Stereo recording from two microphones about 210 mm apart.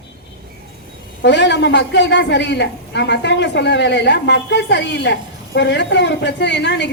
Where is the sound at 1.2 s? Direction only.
55° left (ahead or behind).